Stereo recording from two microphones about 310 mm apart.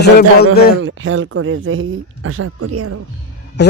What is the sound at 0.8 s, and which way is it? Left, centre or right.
Speech, right.